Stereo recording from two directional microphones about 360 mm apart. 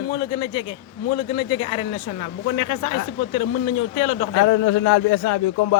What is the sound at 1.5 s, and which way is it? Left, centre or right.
Speech, centre.